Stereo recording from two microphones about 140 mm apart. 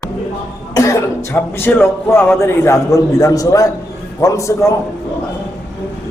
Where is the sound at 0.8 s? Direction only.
20° left (ahead or behind).